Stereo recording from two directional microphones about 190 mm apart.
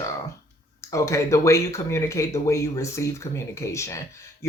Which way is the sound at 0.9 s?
15° left (ahead or behind).